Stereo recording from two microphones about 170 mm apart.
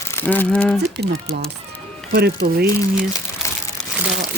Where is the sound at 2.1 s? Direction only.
65° right (ahead or behind).